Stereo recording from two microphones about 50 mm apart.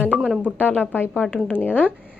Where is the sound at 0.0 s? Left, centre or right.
Right.